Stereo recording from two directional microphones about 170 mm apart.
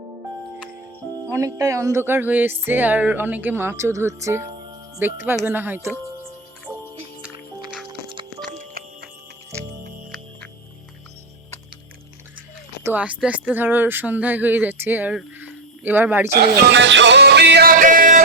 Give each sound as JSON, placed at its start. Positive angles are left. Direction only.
{"t": 1.3, "sound": "speech", "side_deg": -20}
{"t": 7.9, "sound": "music", "side_deg": -30}
{"t": 8.4, "sound": "music", "side_deg": -50}
{"t": 12.8, "sound": "speech", "side_deg": -10}
{"t": 16.3, "sound": "music", "side_deg": -80}